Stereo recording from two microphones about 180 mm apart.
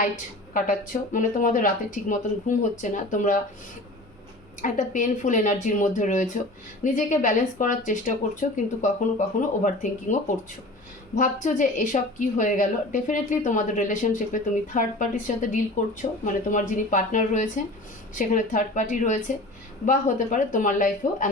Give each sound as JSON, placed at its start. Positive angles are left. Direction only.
{"t": 0.5, "sound": "speech", "side_deg": 45}
{"t": 4.6, "sound": "speech", "side_deg": 45}